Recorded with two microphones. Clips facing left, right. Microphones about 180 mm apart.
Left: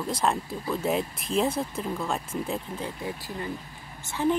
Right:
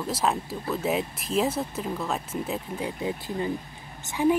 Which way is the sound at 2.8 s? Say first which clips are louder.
Right 4 dB; 20° right (ahead or behind).